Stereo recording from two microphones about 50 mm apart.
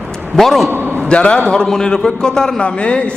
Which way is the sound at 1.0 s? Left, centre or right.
Left.